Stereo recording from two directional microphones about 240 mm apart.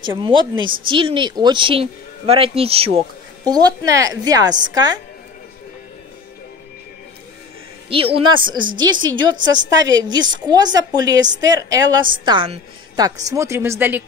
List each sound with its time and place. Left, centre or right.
0.0 s a woman's voice: centre
7.9 s a woman's voice: right